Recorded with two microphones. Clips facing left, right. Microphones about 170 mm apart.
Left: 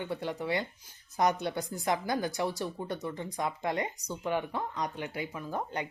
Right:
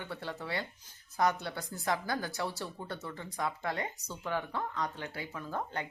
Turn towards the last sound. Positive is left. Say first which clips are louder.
# left 2 dB
turn(degrees=15)  # may be behind; listen again after turning